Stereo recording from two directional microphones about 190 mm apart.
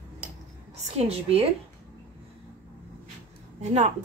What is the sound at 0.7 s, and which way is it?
Speech, 35° right (ahead or behind).